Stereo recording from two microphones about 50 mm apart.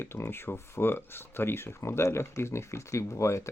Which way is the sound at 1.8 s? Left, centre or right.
Left.